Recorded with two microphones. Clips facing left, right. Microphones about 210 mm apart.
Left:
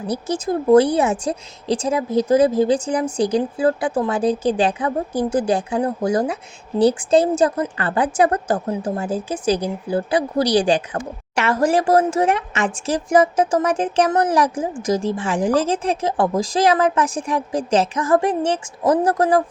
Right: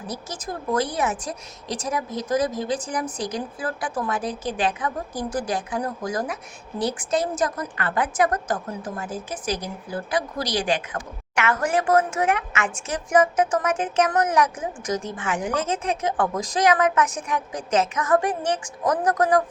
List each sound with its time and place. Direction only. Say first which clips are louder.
0.1 s a woman's voice: left 12 dB; 30° left (ahead or behind)